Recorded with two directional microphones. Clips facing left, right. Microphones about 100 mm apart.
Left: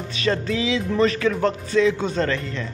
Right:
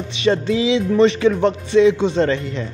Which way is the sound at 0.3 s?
25° right (ahead or behind).